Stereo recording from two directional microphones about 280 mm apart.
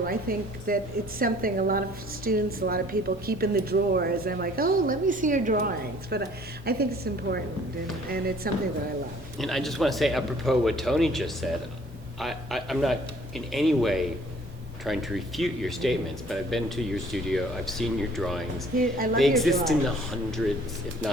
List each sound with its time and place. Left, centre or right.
0.0 s speech: right
8.4 s speech: right
9.4 s speech: centre
12.2 s speech: centre
18.8 s speech: right
19.1 s speech: centre